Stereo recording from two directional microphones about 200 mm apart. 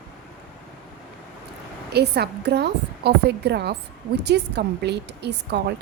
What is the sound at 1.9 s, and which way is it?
A woman's voice, 55° right (ahead or behind).